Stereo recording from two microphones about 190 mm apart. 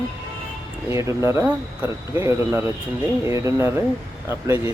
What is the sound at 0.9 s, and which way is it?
Speech, 15° right (ahead or behind).